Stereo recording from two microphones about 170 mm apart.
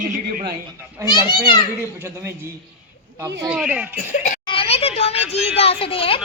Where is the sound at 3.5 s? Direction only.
5° right (ahead or behind).